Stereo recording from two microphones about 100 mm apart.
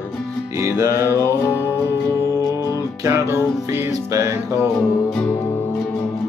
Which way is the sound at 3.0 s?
25° right (ahead or behind).